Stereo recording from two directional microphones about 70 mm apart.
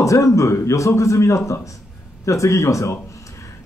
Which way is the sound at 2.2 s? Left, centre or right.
Left.